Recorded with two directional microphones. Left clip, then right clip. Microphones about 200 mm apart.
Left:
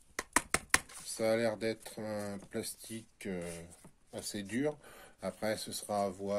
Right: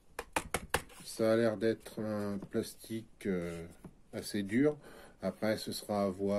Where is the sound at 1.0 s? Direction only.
15° left (ahead or behind).